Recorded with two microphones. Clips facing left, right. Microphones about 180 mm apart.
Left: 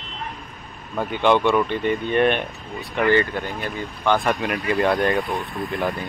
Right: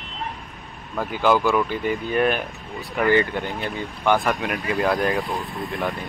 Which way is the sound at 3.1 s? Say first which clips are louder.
Even; 15° right (ahead or behind).